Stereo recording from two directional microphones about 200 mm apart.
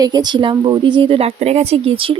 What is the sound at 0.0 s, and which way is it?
A woman's voice, 20° right (ahead or behind).